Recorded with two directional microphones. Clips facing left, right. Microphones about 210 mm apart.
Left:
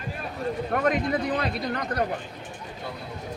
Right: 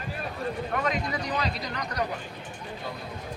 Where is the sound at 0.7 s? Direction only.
55° left (ahead or behind).